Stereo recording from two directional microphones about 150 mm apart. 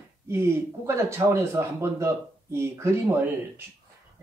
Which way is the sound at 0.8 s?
20° right (ahead or behind).